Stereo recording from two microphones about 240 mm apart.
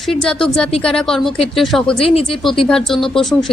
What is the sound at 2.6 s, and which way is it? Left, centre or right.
Speech, centre.